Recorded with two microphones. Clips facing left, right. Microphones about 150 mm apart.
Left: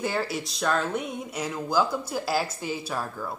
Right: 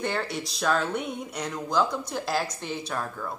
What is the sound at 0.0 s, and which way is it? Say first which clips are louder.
A woman's voice: left 1 dB; 5° left (ahead or behind).